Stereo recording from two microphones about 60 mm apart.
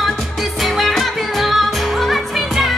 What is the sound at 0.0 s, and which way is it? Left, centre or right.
Music, centre.